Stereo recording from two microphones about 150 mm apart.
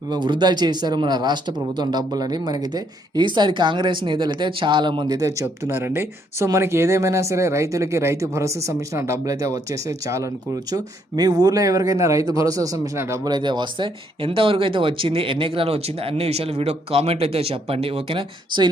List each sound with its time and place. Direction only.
0.1 s a man's voice: 30° right (ahead or behind)